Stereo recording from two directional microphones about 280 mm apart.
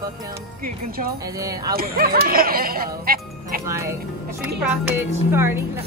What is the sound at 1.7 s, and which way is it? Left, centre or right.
Speech, right.